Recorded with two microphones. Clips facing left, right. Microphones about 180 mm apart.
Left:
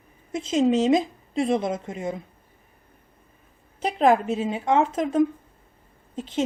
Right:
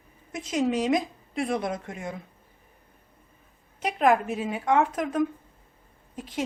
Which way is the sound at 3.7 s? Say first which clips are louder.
Left 3 dB; 30° left (ahead or behind).